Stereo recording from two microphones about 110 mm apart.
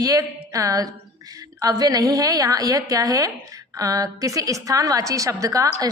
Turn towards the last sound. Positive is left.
turn(degrees=-30)  # may be behind; listen again after turning